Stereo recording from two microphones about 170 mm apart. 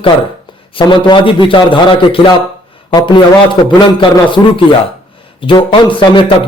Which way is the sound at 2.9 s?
25° left (ahead or behind).